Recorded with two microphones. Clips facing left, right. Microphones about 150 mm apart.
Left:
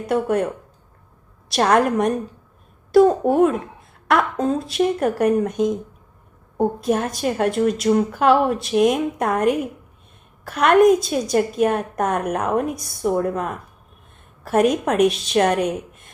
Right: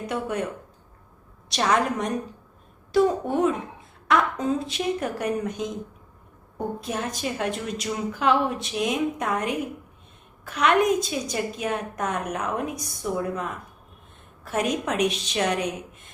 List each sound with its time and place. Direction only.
0.1 s a woman's voice: 55° left (ahead or behind)
1.5 s a woman's voice: 55° left (ahead or behind)